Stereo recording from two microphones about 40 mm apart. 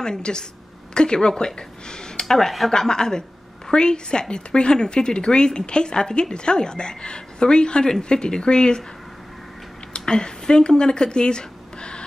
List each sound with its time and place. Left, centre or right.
0.0 s a woman's voice: centre
2.2 s speech: centre
2.7 s a woman's voice: centre
9.9 s speech: left